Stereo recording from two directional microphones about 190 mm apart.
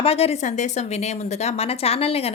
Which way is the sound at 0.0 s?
30° left (ahead or behind).